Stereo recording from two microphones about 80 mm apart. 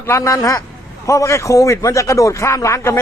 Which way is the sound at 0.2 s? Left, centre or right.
Left.